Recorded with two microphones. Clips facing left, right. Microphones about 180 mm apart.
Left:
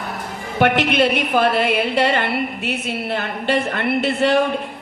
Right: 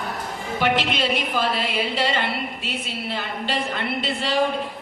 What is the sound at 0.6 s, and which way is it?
Speech, 60° left (ahead or behind).